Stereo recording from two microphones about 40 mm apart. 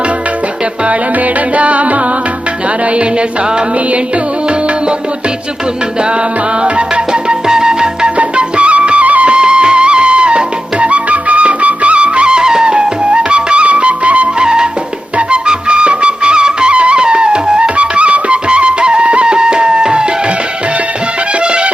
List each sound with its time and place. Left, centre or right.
0.9 s music: right
6.6 s music: right
8.2 s music: right
9.3 s music: right
14.3 s music: centre
17.7 s music: right
21.4 s music: right